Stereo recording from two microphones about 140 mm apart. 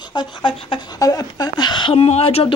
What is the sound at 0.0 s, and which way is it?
Speech, 30° left (ahead or behind).